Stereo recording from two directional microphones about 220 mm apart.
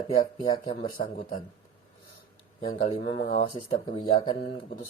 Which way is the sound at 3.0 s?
45° left (ahead or behind).